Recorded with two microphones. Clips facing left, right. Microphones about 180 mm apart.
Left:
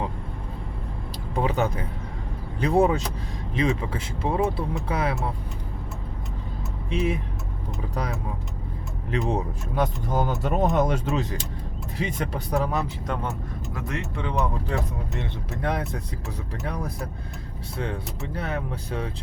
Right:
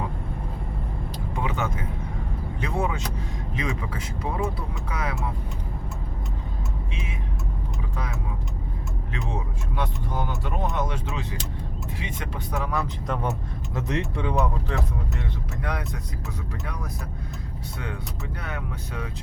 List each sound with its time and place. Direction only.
1.4 s speech: 35° left (ahead or behind)
6.9 s speech: 35° left (ahead or behind)
9.1 s speech: 40° left (ahead or behind)
13.8 s speech: 15° right (ahead or behind)
15.2 s speech: 30° left (ahead or behind)
18.3 s speech: 30° left (ahead or behind)